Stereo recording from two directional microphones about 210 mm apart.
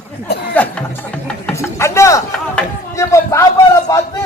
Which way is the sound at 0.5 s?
5° left (ahead or behind).